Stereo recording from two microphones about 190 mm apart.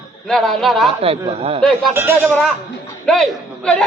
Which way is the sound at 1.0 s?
30° right (ahead or behind).